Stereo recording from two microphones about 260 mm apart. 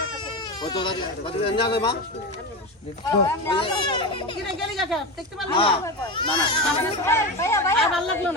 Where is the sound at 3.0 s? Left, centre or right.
Centre.